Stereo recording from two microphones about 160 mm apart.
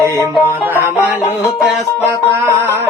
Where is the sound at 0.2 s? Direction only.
15° right (ahead or behind).